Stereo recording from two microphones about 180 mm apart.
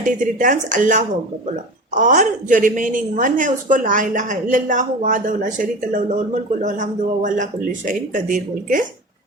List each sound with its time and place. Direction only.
0.0 s a woman's voice: 50° right (ahead or behind)